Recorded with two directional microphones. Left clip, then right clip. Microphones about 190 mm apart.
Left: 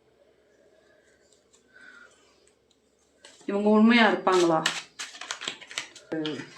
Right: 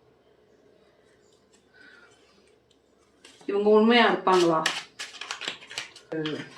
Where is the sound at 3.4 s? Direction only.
40° left (ahead or behind).